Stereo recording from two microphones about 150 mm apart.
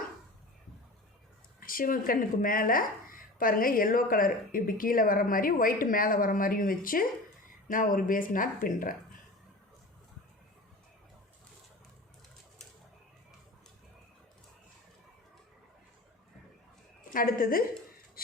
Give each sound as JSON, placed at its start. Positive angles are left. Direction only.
{"t": 1.6, "sound": "a woman's voice", "side_deg": 70}
{"t": 17.1, "sound": "a woman's voice", "side_deg": 70}